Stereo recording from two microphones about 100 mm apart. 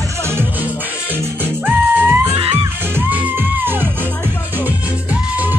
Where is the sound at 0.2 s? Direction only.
25° right (ahead or behind).